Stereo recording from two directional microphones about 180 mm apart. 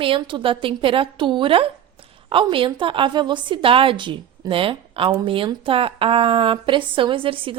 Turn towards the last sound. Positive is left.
turn(degrees=-30)  # may be behind; listen again after turning